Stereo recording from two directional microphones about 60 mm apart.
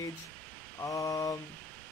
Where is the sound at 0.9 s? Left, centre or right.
Left.